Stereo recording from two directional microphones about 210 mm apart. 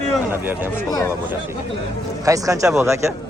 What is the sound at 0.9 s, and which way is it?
Speech, 15° left (ahead or behind).